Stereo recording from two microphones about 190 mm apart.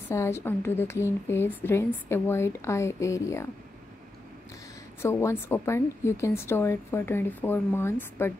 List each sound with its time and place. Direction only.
0.1 s a woman's voice: 15° left (ahead or behind)
5.0 s a woman's voice: 15° left (ahead or behind)